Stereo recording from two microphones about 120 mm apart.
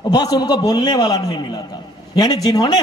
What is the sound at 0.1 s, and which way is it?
A man's voice, 35° left (ahead or behind).